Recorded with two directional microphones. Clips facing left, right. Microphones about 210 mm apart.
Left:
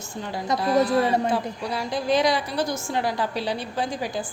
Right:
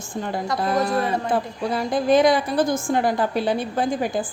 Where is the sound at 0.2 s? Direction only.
50° right (ahead or behind).